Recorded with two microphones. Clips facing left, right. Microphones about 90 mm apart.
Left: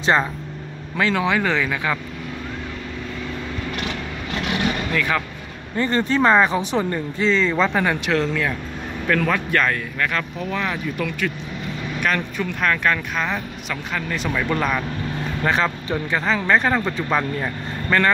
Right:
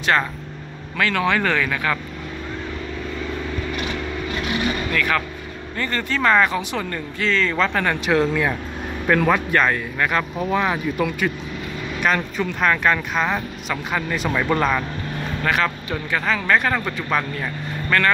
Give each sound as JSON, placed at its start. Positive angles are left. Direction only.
{"t": 0.0, "sound": "speech", "side_deg": 20}
{"t": 4.9, "sound": "speech", "side_deg": 25}
{"t": 8.1, "sound": "speech", "side_deg": -10}
{"t": 11.0, "sound": "speech", "side_deg": -5}
{"t": 15.4, "sound": "speech", "side_deg": 25}